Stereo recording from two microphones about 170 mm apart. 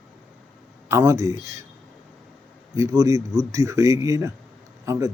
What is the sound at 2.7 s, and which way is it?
Speech, 20° right (ahead or behind).